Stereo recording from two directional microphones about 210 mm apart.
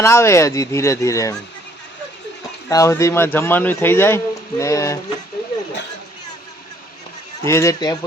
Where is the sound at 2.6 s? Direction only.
15° left (ahead or behind).